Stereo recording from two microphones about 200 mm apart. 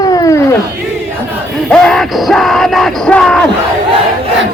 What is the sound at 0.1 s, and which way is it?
Cat, 15° left (ahead or behind).